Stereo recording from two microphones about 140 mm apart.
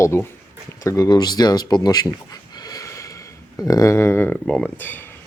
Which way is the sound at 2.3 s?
30° left (ahead or behind).